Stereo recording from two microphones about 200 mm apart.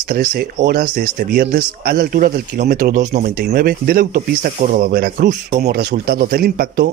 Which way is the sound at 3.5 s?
50° right (ahead or behind).